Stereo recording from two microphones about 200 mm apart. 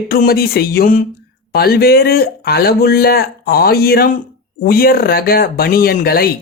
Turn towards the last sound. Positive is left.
turn(degrees=50)  # may be behind; listen again after turning